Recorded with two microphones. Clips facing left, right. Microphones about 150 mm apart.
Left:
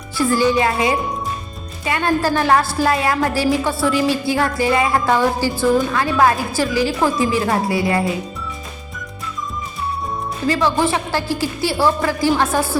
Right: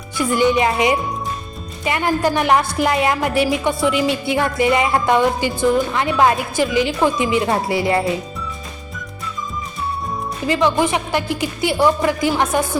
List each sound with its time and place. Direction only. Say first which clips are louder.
0.2 s a woman's voice: even; 20° right (ahead or behind)
10.4 s a woman's voice: right 1 dB; 15° right (ahead or behind)